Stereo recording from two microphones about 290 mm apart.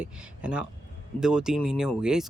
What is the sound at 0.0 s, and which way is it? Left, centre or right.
Speech, centre.